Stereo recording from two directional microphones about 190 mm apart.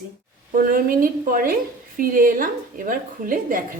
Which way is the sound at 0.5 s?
50° right (ahead or behind).